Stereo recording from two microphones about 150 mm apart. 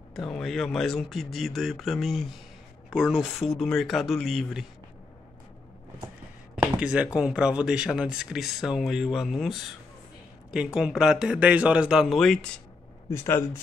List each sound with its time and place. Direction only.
0.1 s speech: 5° left (ahead or behind)
6.5 s a sound: 5° right (ahead or behind)
7.2 s speech: 5° right (ahead or behind)
13.1 s speech: 20° left (ahead or behind)